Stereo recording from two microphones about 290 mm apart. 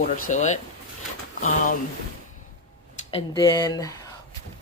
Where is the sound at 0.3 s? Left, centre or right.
Left.